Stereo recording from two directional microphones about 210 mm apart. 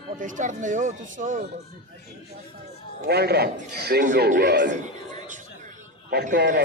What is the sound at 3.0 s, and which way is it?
A man's voice, 50° right (ahead or behind).